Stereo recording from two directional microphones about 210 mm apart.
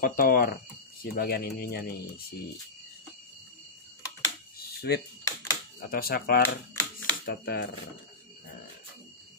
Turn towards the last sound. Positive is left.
turn(degrees=50)  # may be behind; listen again after turning